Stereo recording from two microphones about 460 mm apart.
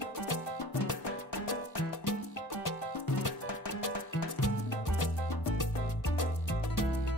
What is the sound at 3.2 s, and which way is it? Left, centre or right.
Music, left.